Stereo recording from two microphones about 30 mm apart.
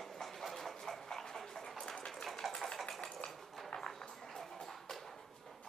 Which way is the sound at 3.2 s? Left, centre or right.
Left.